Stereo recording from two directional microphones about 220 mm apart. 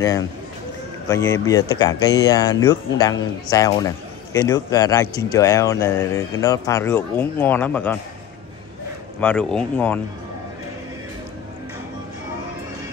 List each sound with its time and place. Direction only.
1.0 s speech: 15° left (ahead or behind)
9.2 s speech: 5° left (ahead or behind)